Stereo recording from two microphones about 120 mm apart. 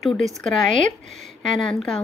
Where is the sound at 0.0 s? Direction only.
5° left (ahead or behind).